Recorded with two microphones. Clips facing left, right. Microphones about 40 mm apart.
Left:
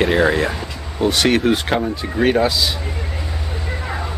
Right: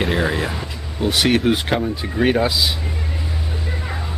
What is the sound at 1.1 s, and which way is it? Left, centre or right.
Speech, centre.